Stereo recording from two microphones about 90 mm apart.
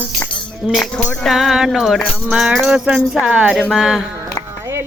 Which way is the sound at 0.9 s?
10° left (ahead or behind).